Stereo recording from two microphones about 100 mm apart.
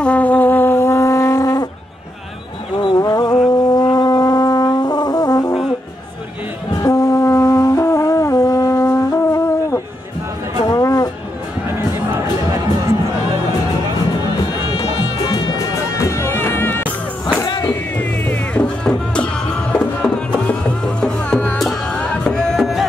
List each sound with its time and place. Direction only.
0.0 s music: 15° left (ahead or behind); by 1.7 s 40° left (ahead or behind)
2.8 s a sound: 45° left (ahead or behind)
3.4 s brass instrument: 40° left (ahead or behind)
6.8 s brass instrument: 35° left (ahead or behind)
10.6 s music: 35° left (ahead or behind)
14.7 s music: 70° left (ahead or behind)
15.5 s music: 35° left (ahead or behind)
17.5 s vehicle: 50° left (ahead or behind)
17.9 s music: 15° left (ahead or behind); by 22.8 s centre (ahead or behind)